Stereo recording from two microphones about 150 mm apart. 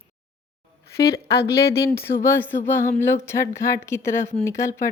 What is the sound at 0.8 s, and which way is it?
Speech, 90° left.